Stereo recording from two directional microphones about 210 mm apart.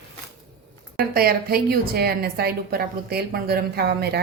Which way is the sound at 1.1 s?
45° right (ahead or behind).